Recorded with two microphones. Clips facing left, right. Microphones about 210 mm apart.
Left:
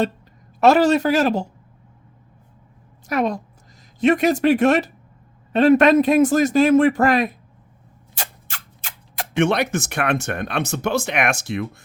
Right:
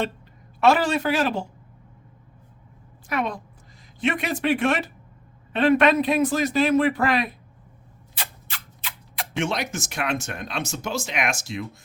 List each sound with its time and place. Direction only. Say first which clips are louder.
0.6 s speech: left 5 dB; 40° left (ahead or behind)
3.1 s a man's voice: left 5 dB; 40° left (ahead or behind); by 11.8 s 60° left (ahead or behind)